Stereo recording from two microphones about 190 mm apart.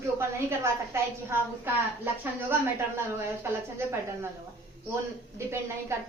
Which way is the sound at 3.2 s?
15° right (ahead or behind).